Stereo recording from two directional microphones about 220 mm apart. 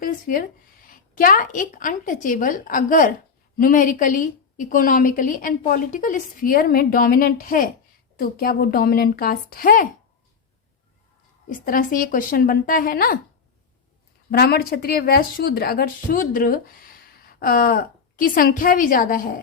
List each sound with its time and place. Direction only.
0.0 s speech: 40° left (ahead or behind)
11.4 s speech: 40° left (ahead or behind)
14.3 s speech: 45° left (ahead or behind)